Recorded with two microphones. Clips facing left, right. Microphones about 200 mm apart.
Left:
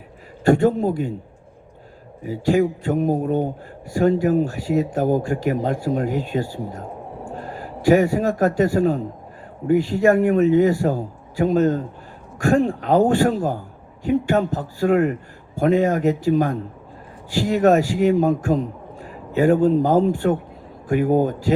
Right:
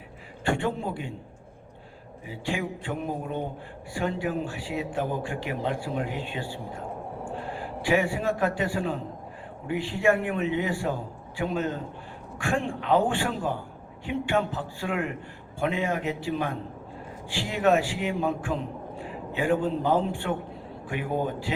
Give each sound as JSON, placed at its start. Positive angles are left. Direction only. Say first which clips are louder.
{"t": 0.4, "sound": "a man's voice", "louder": "left 11 dB", "side_deg": 40}
{"t": 2.2, "sound": "a man's voice", "louder": "left 13 dB", "side_deg": 40}